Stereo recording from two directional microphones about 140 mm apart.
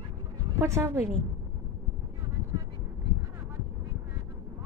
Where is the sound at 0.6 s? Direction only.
20° right (ahead or behind).